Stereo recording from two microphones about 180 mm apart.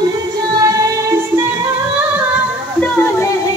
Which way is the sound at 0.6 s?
20° right (ahead or behind).